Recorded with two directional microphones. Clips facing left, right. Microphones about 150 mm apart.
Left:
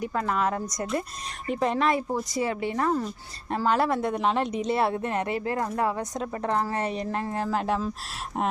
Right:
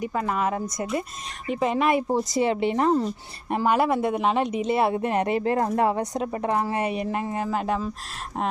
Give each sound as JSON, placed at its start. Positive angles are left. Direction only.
{"t": 0.0, "sound": "a woman's voice", "side_deg": -5}
{"t": 3.8, "sound": "speech", "side_deg": -5}
{"t": 4.9, "sound": "a woman's voice", "side_deg": -15}